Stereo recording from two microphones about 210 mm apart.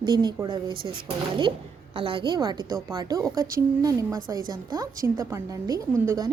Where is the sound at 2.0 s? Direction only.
25° right (ahead or behind).